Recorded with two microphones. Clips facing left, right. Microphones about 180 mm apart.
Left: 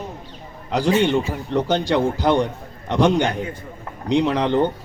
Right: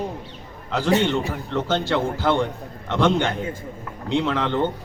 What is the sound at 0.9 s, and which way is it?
A man's voice, 15° left (ahead or behind).